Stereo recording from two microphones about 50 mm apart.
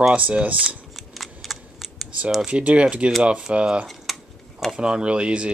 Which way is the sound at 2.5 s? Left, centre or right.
Right.